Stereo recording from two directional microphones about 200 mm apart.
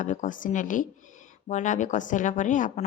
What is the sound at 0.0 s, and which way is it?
Speech, 40° left (ahead or behind).